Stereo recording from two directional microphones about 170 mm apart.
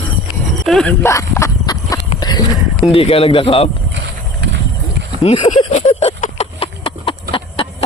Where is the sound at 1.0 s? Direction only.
15° left (ahead or behind).